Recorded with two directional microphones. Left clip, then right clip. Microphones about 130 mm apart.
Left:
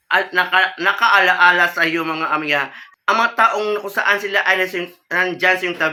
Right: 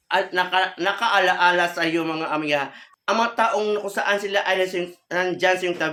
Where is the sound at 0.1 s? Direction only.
40° right (ahead or behind).